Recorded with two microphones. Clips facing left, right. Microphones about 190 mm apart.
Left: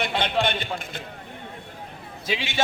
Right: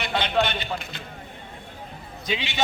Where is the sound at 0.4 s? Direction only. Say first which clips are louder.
Left 2 dB; 50° left (ahead or behind).